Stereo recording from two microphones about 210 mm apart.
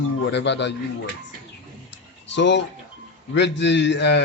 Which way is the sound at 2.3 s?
55° left (ahead or behind).